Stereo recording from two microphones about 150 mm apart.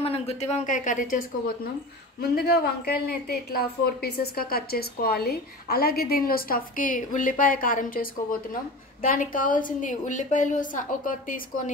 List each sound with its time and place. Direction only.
0.0 s a woman's voice: 40° left (ahead or behind); by 1.7 s 65° left (ahead or behind)
2.1 s a woman's voice: 90° left; by 11.7 s 65° left (ahead or behind)